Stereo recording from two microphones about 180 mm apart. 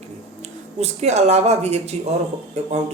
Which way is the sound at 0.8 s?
35° right (ahead or behind).